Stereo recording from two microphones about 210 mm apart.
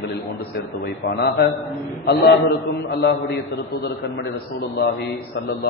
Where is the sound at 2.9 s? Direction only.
50° left (ahead or behind).